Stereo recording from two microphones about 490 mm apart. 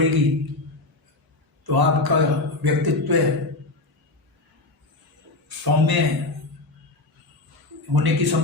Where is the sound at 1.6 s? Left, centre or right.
Right.